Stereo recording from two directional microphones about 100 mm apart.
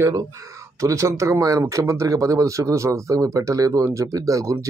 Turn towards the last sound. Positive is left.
turn(degrees=-30)  # may be behind; listen again after turning